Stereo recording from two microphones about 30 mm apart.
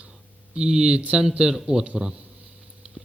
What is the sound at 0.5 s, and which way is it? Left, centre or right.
Speech, right.